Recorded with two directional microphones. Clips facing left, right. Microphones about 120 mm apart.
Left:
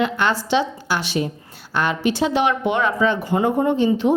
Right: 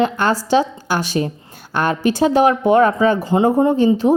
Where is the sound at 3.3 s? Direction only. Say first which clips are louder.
Right 4 dB; 30° right (ahead or behind).